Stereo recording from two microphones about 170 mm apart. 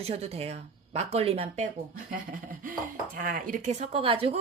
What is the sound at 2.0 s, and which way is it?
A woman's voice, 50° right (ahead or behind).